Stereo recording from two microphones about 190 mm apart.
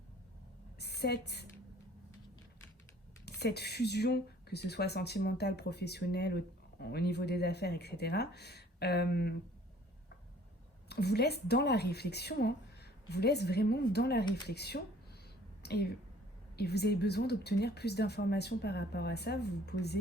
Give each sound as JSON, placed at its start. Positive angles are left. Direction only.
{"t": 0.8, "sound": "a woman's voice", "side_deg": 60}
{"t": 3.2, "sound": "speech", "side_deg": 60}
{"t": 10.8, "sound": "speech", "side_deg": 60}